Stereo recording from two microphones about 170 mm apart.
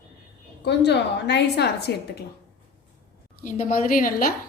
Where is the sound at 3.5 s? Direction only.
55° left (ahead or behind).